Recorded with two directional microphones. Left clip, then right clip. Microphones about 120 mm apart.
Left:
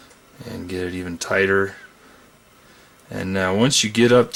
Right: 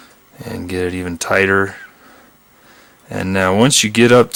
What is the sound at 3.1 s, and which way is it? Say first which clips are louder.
Speech: right 6 dB; 40° right (ahead or behind).